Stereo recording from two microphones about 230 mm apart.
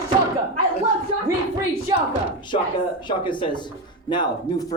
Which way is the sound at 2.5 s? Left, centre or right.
Left.